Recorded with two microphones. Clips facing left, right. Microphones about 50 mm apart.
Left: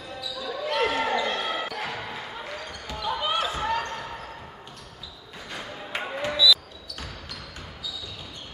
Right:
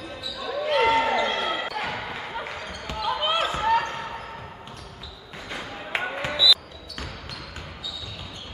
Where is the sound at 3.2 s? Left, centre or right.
Right.